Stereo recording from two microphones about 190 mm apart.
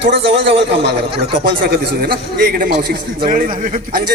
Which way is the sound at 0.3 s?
65° right (ahead or behind).